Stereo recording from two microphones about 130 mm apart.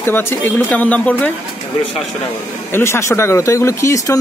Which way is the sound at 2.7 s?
20° left (ahead or behind).